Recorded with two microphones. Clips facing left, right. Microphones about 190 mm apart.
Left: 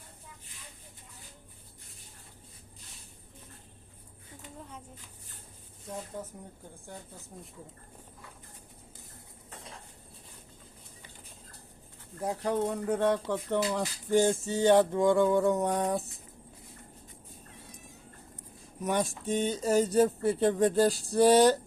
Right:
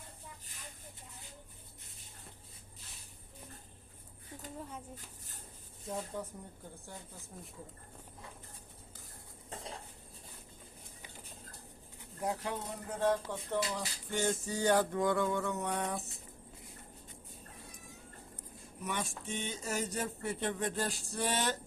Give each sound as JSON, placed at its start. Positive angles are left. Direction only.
{"t": 12.2, "sound": "speech", "side_deg": 35}
{"t": 12.5, "sound": "speech", "side_deg": 60}
{"t": 14.1, "sound": "speech", "side_deg": 30}
{"t": 18.9, "sound": "speech", "side_deg": 40}